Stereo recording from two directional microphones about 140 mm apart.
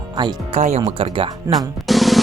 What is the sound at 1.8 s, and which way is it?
Drum, centre (ahead or behind).